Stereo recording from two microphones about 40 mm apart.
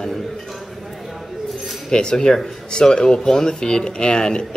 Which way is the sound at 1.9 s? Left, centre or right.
Centre.